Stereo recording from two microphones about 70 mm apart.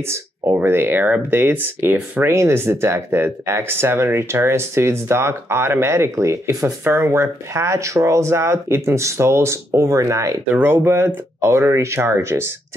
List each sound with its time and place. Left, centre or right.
0.7 s speech: right
10.6 s speech: right